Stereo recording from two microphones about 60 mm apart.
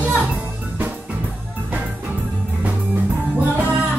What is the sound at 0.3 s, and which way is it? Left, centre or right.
Music, right.